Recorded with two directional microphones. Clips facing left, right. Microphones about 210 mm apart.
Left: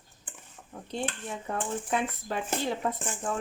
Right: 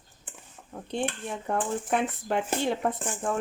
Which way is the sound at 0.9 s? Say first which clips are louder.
Right 3 dB; 50° right (ahead or behind).